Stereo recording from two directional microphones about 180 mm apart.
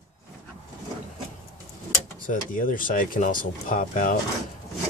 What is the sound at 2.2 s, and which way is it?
Speech, 50° left (ahead or behind).